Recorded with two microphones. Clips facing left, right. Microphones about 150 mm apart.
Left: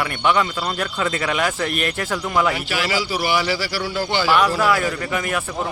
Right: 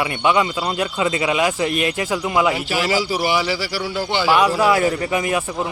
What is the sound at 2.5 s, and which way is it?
Speech, 35° right (ahead or behind).